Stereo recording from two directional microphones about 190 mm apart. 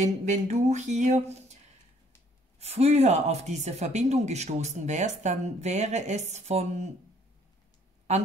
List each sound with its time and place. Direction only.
0.0 s speech: 40° right (ahead or behind)
2.6 s speech: 35° right (ahead or behind)